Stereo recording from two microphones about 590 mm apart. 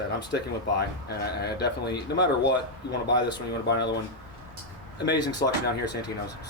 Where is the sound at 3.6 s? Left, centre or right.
Centre.